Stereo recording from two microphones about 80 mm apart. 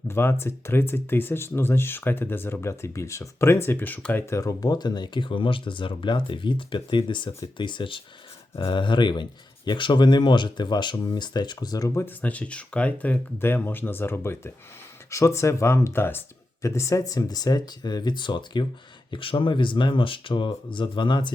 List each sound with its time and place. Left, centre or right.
0.1 s speech: left
4.1 s speech: left
11.9 s speech: left
16.6 s speech: left
19.1 s speech: left